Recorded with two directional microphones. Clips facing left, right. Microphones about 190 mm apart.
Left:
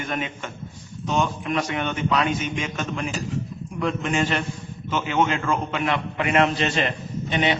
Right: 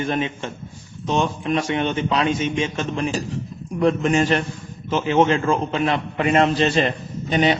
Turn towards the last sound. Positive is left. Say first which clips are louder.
# right 4 dB
turn(degrees=-40)  # may be behind; listen again after turning